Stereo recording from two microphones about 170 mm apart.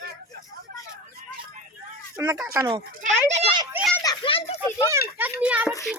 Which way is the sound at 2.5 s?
25° right (ahead or behind).